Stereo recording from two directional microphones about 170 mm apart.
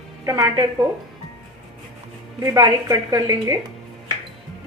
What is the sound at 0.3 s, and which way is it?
Speech, 20° right (ahead or behind).